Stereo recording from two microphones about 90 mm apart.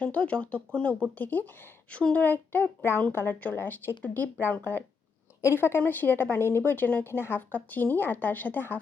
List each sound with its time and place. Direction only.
0.0 s speech: 15° left (ahead or behind)